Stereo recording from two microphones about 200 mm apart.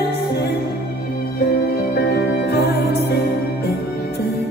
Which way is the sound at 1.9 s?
55° left (ahead or behind).